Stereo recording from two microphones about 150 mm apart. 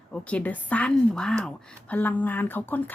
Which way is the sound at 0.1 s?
10° left (ahead or behind).